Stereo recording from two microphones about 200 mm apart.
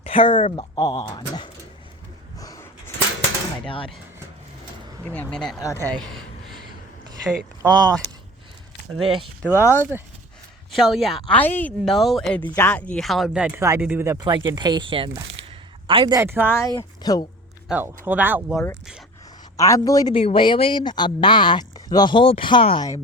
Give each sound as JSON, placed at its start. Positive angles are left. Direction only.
{"t": 0.0, "sound": "speech", "side_deg": 25}
{"t": 0.8, "sound": "speech", "side_deg": 20}
{"t": 2.4, "sound": "a sound", "side_deg": 15}
{"t": 5.0, "sound": "speech", "side_deg": 10}
{"t": 5.5, "sound": "speech", "side_deg": 15}
{"t": 7.6, "sound": "speech", "side_deg": -20}
{"t": 9.4, "sound": "speech", "side_deg": 10}
{"t": 10.7, "sound": "speech", "side_deg": 0}
{"t": 15.1, "sound": "speech", "side_deg": -70}
{"t": 15.9, "sound": "speech", "side_deg": -25}
{"t": 16.5, "sound": "speech", "side_deg": 15}
{"t": 17.7, "sound": "speech", "side_deg": -10}
{"t": 19.5, "sound": "speech", "side_deg": 15}